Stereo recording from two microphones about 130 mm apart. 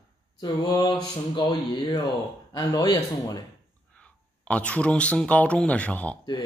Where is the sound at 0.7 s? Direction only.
30° left (ahead or behind).